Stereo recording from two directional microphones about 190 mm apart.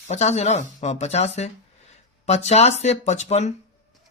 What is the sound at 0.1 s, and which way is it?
Speech, 35° left (ahead or behind).